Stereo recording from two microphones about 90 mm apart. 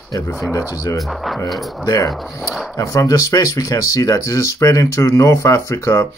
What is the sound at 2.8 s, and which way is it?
Speech, 35° left (ahead or behind).